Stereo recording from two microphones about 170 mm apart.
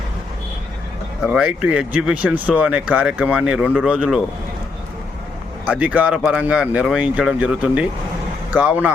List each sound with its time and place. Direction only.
1.3 s speech: 5° right (ahead or behind)
5.6 s speech: 5° right (ahead or behind)